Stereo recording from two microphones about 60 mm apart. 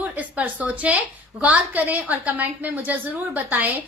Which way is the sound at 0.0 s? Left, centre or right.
Right.